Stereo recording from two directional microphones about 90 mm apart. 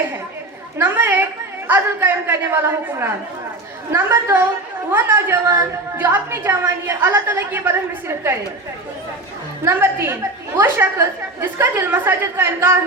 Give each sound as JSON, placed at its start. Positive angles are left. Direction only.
{"t": 0.8, "sound": "a woman's voice", "side_deg": -20}
{"t": 9.6, "sound": "a woman's voice", "side_deg": -25}